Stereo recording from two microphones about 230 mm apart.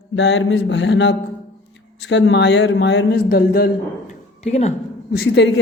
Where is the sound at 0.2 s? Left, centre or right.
Left.